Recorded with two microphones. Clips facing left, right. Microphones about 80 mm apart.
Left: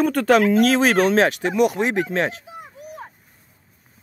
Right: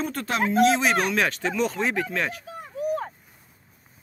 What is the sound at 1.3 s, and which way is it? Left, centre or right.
Speech, centre.